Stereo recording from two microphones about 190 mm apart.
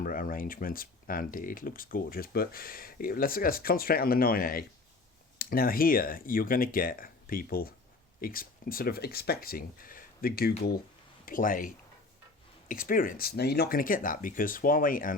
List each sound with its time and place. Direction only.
0.0 s speech: 50° left (ahead or behind)